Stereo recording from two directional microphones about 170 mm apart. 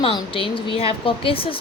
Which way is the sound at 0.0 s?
30° left (ahead or behind).